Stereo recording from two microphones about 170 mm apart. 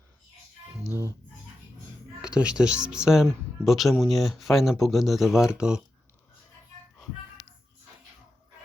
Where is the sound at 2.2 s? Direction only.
5° right (ahead or behind).